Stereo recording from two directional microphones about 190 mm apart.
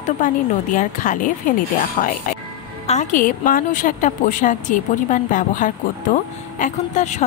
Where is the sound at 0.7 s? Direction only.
45° left (ahead or behind).